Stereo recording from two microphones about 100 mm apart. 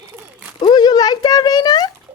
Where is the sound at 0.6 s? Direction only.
50° left (ahead or behind).